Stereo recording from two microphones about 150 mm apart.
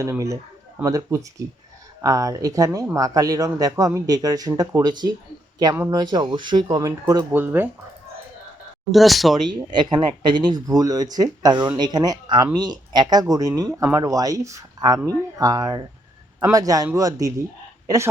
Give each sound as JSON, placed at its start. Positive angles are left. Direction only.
{"t": 0.0, "sound": "speech", "side_deg": -20}
{"t": 7.3, "sound": "speech", "side_deg": -15}
{"t": 8.9, "sound": "speech", "side_deg": 0}
{"t": 9.7, "sound": "a woman's voice", "side_deg": -30}